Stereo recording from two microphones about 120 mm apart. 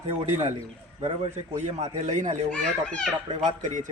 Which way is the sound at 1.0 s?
65° right (ahead or behind).